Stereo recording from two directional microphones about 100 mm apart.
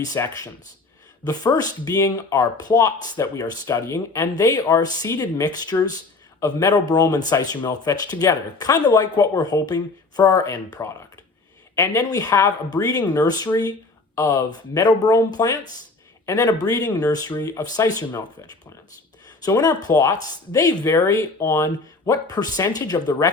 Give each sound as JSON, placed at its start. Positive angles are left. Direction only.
{"t": 0.2, "sound": "speech", "side_deg": 30}
{"t": 19.5, "sound": "speech", "side_deg": 35}